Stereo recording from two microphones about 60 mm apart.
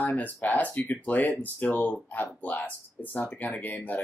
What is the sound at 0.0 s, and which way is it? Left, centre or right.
Speech, left.